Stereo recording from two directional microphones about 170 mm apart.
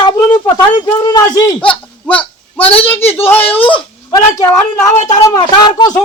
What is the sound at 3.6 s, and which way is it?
Speech, 25° left (ahead or behind).